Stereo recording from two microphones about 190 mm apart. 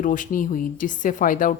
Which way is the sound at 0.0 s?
45° left (ahead or behind).